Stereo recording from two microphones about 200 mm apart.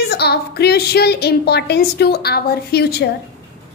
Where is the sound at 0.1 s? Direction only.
55° left (ahead or behind).